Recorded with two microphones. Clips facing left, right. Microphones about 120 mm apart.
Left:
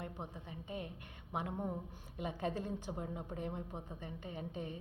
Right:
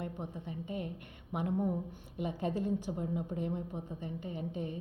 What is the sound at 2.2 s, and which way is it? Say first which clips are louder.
A woman's voice: right 5 dB; 45° left (ahead or behind).